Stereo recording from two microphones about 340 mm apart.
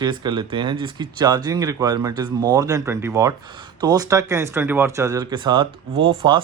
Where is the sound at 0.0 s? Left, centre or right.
Centre.